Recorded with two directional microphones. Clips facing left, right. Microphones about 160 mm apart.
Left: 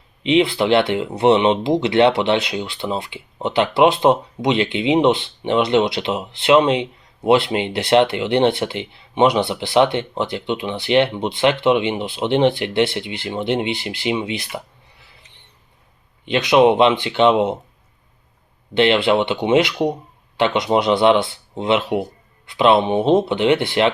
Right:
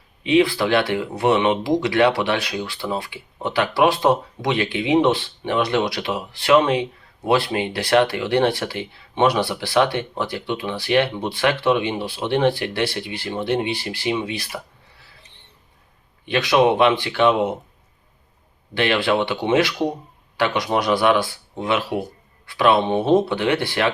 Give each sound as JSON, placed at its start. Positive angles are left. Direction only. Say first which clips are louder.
{"t": 0.2, "sound": "speech", "louder": "left 1 dB", "side_deg": 20}
{"t": 18.7, "sound": "speech", "louder": "left 4 dB", "side_deg": 20}